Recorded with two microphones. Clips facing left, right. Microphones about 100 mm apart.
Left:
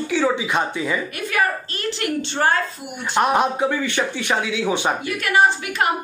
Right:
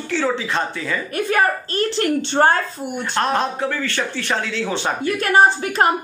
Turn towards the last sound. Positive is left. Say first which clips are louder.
# right 3 dB
turn(degrees=-35)  # may be behind; listen again after turning